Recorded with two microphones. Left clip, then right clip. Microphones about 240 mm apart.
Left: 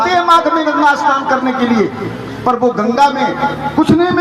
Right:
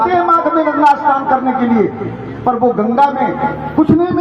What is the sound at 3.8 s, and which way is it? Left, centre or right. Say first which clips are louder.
Speech: left 1 dB; left.